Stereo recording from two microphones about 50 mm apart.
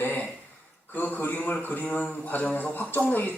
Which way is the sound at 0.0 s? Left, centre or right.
Left.